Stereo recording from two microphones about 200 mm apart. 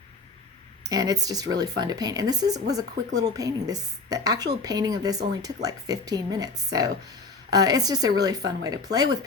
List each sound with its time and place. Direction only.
0.9 s speech: 20° right (ahead or behind)